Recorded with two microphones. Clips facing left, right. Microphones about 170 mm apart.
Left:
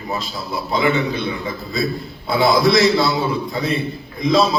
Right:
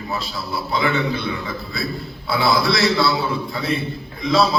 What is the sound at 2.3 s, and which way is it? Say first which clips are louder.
Speech: left 5 dB; 20° left (ahead or behind).